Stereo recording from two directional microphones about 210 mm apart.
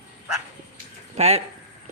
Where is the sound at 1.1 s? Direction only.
30° right (ahead or behind).